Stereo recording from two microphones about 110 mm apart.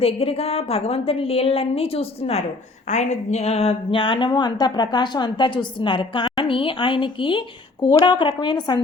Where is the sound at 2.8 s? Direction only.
90° left.